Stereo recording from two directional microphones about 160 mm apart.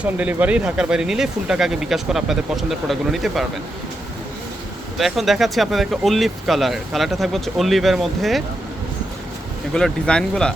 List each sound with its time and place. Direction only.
0.0 s speech: 10° right (ahead or behind)
4.9 s speech: centre (ahead or behind)
9.7 s speech: 5° left (ahead or behind)